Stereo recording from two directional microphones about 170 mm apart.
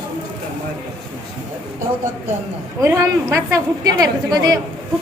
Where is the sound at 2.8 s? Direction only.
20° right (ahead or behind).